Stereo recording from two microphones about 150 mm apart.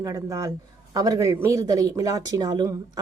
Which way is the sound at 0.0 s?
20° right (ahead or behind).